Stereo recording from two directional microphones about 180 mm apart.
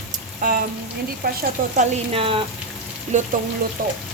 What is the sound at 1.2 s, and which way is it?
Speech, 55° right (ahead or behind).